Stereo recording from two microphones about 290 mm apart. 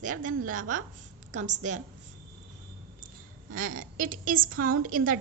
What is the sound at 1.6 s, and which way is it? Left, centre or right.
Speech, right.